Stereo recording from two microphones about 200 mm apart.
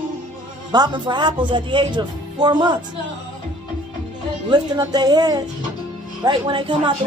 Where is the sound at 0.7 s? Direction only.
20° right (ahead or behind).